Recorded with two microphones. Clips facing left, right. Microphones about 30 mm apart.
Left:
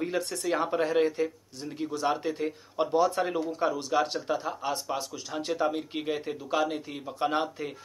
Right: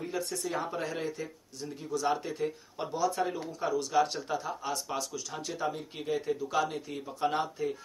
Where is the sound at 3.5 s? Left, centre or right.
Left.